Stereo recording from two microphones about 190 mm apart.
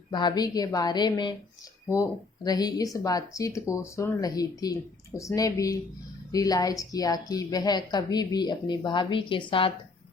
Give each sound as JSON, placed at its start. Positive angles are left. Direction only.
{"t": 0.1, "sound": "a woman's voice", "side_deg": 25}